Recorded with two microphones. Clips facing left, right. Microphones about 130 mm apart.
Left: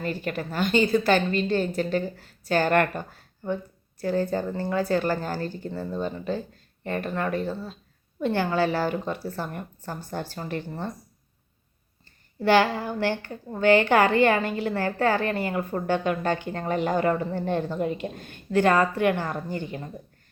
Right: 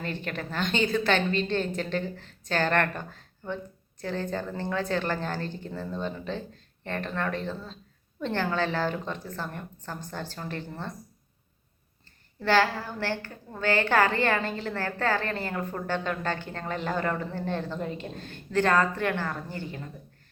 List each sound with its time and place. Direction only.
0.0 s a woman's voice: 5° left (ahead or behind)
12.4 s a woman's voice: 15° left (ahead or behind)